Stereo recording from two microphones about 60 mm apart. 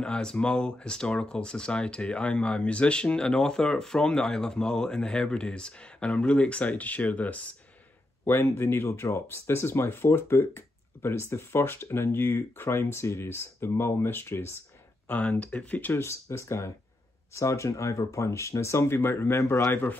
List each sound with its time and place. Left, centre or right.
0.0 s speech: centre
8.3 s speech: left
15.0 s speech: left
15.9 s speech: left